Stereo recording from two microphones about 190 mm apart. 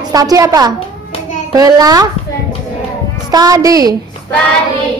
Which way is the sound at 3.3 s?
20° right (ahead or behind).